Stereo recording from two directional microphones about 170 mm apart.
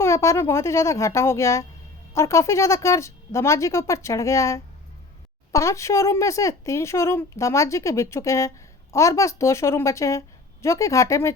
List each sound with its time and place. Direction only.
0.0 s speech: 15° left (ahead or behind)